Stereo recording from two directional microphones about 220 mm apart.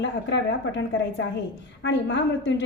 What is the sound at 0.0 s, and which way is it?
Speech, 55° left (ahead or behind).